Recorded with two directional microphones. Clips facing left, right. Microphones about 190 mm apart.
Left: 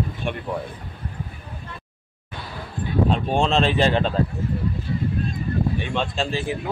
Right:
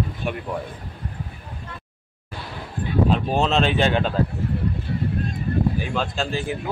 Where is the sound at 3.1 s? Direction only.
Centre (ahead or behind).